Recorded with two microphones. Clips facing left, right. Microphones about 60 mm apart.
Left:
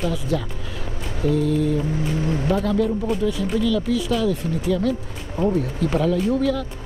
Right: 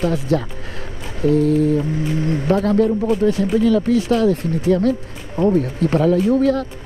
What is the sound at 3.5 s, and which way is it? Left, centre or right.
Speech, right.